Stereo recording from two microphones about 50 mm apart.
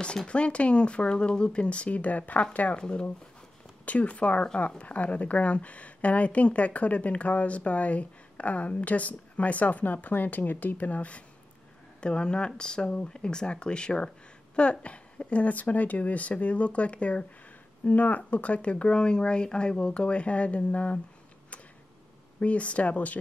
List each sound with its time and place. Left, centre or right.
0.3 s speech: left
2.8 s speech: centre
22.4 s speech: left